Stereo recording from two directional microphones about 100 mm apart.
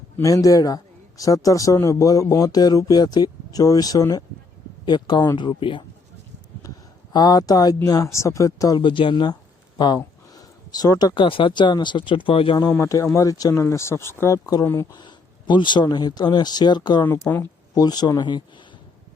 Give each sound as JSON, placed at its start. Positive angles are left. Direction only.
{"t": 0.2, "sound": "speech", "side_deg": 35}
{"t": 4.9, "sound": "speech", "side_deg": 50}
{"t": 7.1, "sound": "speech", "side_deg": 40}
{"t": 8.8, "sound": "speech", "side_deg": 55}
{"t": 12.8, "sound": "speech", "side_deg": 30}
{"t": 14.9, "sound": "speech", "side_deg": 50}
{"t": 17.2, "sound": "speech", "side_deg": 20}
{"t": 17.7, "sound": "speech", "side_deg": 45}